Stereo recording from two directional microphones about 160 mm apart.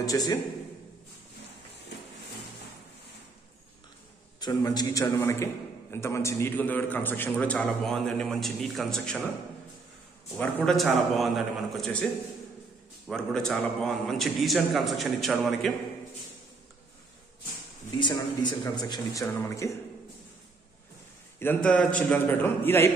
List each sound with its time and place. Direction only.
0.0 s speech: 25° left (ahead or behind)
4.4 s a man's voice: 25° left (ahead or behind); by 9.2 s 5° left (ahead or behind)
10.3 s a man's voice: 5° left (ahead or behind)
13.1 s a man's voice: 5° left (ahead or behind)
17.9 s speech: 30° left (ahead or behind)
21.4 s a man's voice: 10° left (ahead or behind)